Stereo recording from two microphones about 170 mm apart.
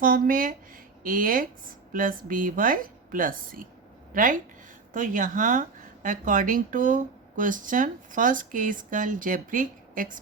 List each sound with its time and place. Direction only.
0.0 s a woman's voice: 55° right (ahead or behind)